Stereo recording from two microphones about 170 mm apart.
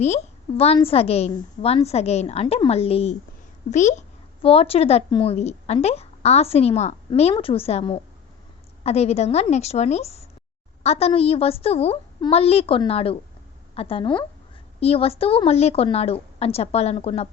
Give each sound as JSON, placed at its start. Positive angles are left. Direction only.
{"t": 0.0, "sound": "a woman's voice", "side_deg": 40}